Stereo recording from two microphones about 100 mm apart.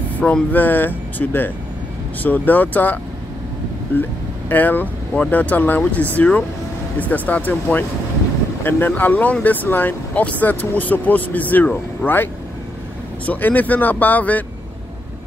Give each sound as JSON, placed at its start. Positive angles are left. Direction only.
{"t": 0.2, "sound": "speech", "side_deg": 15}
{"t": 3.9, "sound": "vehicle", "side_deg": 20}
{"t": 4.5, "sound": "speech", "side_deg": 20}